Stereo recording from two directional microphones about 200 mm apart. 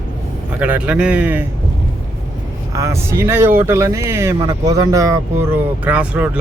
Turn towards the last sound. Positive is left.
turn(degrees=-5)  # may be behind; listen again after turning